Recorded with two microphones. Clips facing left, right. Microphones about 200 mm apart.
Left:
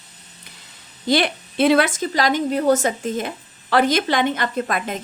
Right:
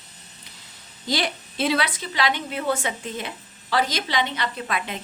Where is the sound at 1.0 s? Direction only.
60° left (ahead or behind).